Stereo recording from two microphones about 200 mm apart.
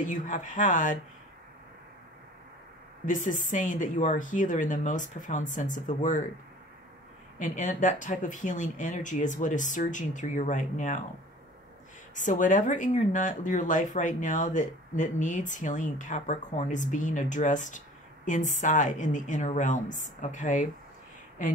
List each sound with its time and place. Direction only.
0.0 s speech: 40° left (ahead or behind)
3.1 s speech: 40° left (ahead or behind)
7.3 s speech: 35° left (ahead or behind)
12.2 s speech: 40° left (ahead or behind)